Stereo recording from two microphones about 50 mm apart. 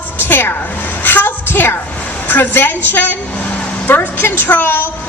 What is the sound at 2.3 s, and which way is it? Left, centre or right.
A woman's voice, left.